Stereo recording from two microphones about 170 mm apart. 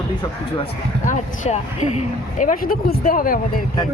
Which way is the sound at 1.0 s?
45° left (ahead or behind).